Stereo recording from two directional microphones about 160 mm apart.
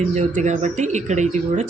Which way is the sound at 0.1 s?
45° right (ahead or behind).